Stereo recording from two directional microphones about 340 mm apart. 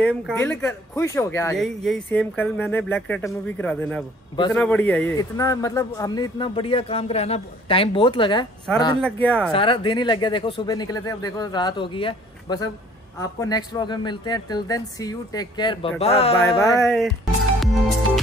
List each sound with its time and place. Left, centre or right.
0.0 s speech: centre
9.5 s speech: centre
16.6 s speech: centre